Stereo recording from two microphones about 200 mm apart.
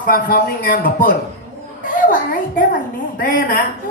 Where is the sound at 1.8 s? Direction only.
45° left (ahead or behind).